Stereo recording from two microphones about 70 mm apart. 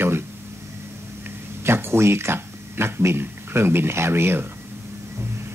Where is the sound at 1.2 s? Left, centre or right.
Right.